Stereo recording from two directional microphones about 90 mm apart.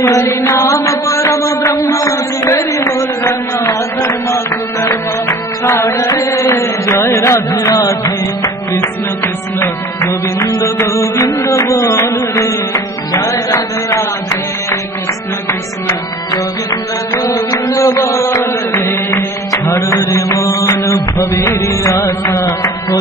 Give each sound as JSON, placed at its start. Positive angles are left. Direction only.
{"t": 0.2, "sound": "mantra", "side_deg": 30}
{"t": 5.7, "sound": "music", "side_deg": 30}
{"t": 9.6, "sound": "music", "side_deg": 35}
{"t": 17.1, "sound": "music", "side_deg": 40}